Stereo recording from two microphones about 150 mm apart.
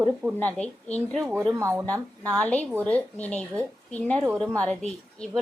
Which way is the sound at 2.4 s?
10° left (ahead or behind).